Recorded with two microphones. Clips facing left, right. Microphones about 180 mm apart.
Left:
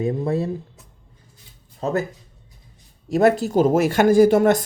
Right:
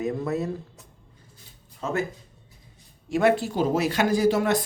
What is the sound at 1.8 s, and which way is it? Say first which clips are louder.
Speech: left 4 dB; 40° left (ahead or behind).